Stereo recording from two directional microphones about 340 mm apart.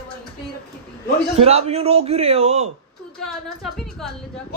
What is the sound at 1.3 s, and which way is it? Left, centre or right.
A man's voice, centre.